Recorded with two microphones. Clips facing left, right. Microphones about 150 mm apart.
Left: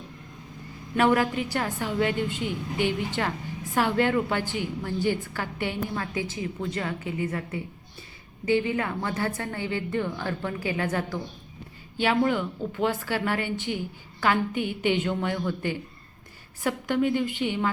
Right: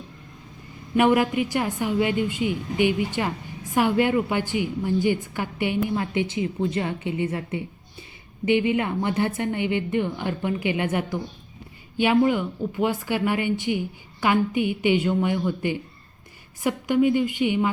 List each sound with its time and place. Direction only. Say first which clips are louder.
0.9 s a woman's voice: right 3 dB; 15° right (ahead or behind)